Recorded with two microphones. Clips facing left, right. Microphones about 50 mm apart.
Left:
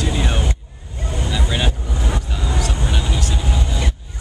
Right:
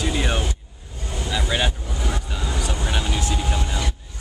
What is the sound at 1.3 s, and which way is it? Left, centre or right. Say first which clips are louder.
Vehicle: even; centre.